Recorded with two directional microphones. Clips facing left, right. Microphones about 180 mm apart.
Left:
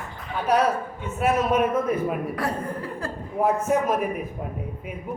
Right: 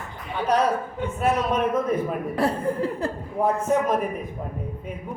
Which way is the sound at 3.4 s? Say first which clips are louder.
Even; 5° left (ahead or behind).